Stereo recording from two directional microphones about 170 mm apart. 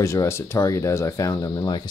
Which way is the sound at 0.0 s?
15° left (ahead or behind).